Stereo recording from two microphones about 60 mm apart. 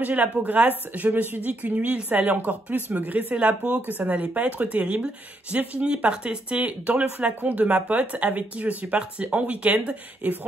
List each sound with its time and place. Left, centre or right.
0.0 s speech: right